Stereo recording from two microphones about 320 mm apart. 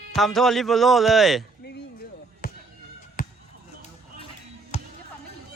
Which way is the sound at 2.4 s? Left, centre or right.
Left.